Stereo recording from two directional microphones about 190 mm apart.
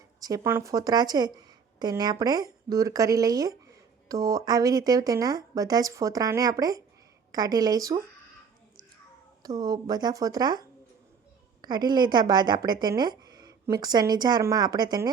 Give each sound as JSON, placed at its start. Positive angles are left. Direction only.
{"t": 0.2, "sound": "speech", "side_deg": -20}
{"t": 9.4, "sound": "speech", "side_deg": -20}